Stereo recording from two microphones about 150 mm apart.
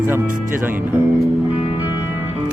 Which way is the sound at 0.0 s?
15° right (ahead or behind).